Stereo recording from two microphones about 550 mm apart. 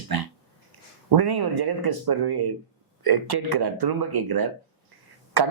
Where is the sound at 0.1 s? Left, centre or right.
Right.